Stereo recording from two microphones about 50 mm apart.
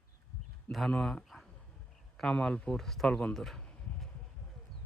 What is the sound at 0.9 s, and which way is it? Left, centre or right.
Speech, centre.